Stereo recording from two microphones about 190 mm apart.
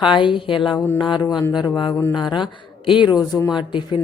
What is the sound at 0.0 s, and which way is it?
A woman's voice, 25° left (ahead or behind).